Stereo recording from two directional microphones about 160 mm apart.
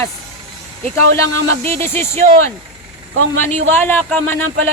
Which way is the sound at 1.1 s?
20° left (ahead or behind).